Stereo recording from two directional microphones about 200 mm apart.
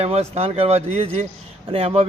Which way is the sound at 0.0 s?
30° right (ahead or behind).